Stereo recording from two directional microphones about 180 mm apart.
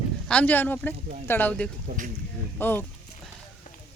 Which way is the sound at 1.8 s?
45° right (ahead or behind).